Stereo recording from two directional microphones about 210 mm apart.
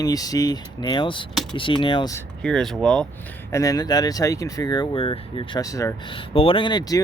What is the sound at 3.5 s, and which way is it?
Speech, 15° left (ahead or behind).